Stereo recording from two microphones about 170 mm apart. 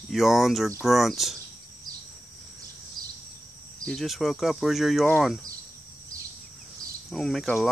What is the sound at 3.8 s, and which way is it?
Speech, centre (ahead or behind).